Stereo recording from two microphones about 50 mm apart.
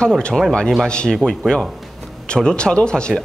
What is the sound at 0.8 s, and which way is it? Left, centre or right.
Speech, centre.